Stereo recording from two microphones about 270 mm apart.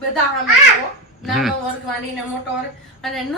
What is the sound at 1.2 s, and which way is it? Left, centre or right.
Speech, centre.